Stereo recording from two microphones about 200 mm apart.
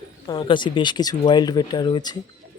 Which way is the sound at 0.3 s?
25° left (ahead or behind).